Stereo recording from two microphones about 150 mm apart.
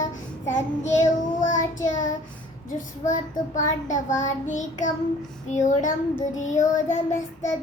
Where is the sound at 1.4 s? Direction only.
55° left (ahead or behind).